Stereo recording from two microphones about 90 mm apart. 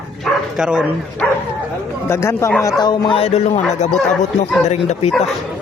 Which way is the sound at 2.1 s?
30° left (ahead or behind).